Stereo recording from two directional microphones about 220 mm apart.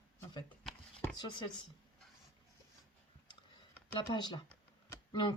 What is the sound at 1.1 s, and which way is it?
Speech, 20° left (ahead or behind).